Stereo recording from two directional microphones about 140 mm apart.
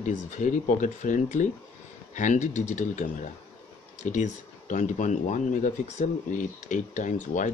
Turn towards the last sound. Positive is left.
turn(degrees=65)  # may be behind; listen again after turning